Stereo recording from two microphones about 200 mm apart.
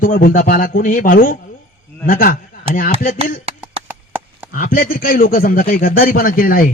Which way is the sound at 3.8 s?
10° right (ahead or behind).